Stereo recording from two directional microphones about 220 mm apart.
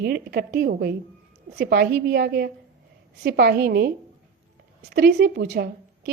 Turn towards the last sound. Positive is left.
turn(degrees=-45)  # may be behind; listen again after turning